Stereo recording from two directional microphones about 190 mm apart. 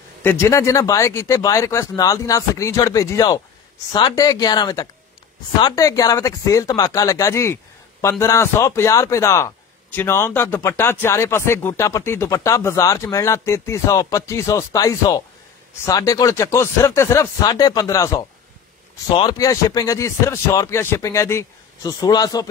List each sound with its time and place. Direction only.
0.2 s speech: 10° left (ahead or behind)